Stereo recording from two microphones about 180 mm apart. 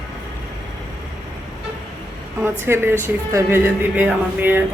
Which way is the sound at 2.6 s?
15° right (ahead or behind).